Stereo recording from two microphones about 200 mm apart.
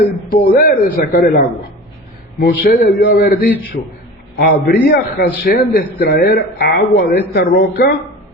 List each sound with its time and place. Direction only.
0.3 s speech: 45° left (ahead or behind)